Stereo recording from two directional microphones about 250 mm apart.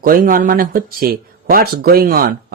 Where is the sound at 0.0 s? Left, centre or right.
Right.